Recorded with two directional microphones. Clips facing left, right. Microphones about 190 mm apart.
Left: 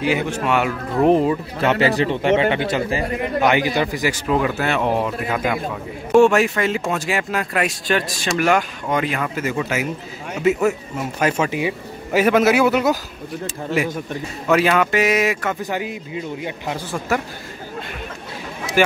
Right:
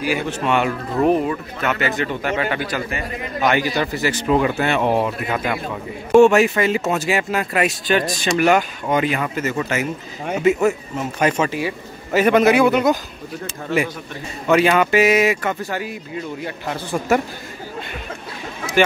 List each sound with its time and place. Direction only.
0.0 s speech: 20° left (ahead or behind)
0.3 s speech: 5° left (ahead or behind)
1.0 s speech: 25° left (ahead or behind)
3.3 s a man's voice: 15° left (ahead or behind)
4.3 s speech: centre (ahead or behind)
9.4 s a man's voice: 10° left (ahead or behind)
14.5 s speech: centre (ahead or behind)
15.6 s a man's voice: 15° left (ahead or behind)